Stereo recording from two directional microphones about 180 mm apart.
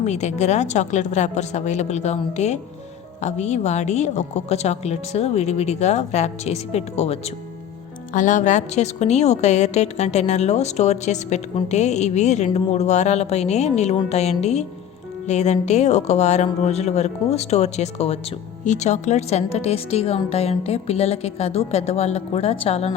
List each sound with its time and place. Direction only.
0.0 s a woman's voice: 40° left (ahead or behind)